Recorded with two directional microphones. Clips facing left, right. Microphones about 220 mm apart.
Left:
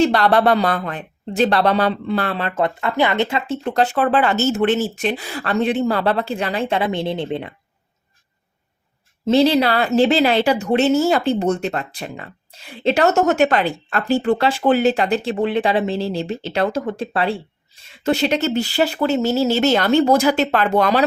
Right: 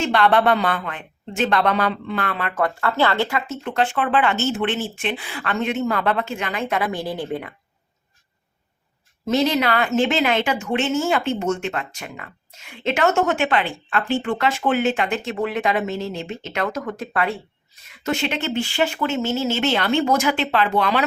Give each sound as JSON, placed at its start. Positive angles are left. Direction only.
{"t": 0.0, "sound": "a woman's voice", "side_deg": 35}
{"t": 9.2, "sound": "a woman's voice", "side_deg": 30}